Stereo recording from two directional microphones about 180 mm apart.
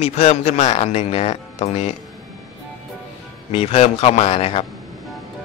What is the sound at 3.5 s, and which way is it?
Speech, 35° left (ahead or behind).